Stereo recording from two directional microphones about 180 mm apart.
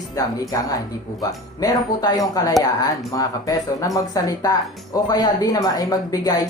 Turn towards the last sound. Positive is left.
turn(degrees=20)  # may be behind; listen again after turning